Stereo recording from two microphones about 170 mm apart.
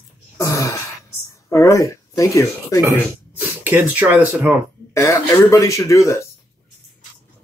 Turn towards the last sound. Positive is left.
turn(degrees=15)  # may be behind; listen again after turning